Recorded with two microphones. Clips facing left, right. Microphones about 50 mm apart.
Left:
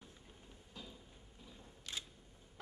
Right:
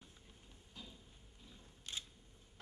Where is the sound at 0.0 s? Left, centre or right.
Centre.